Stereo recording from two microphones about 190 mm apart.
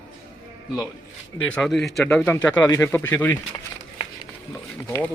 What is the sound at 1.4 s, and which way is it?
Speech, 5° left (ahead or behind).